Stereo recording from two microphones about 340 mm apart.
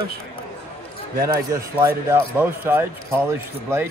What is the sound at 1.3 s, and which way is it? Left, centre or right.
Speech, centre.